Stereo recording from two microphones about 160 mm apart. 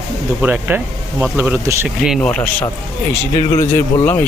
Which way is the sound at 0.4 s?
10° right (ahead or behind).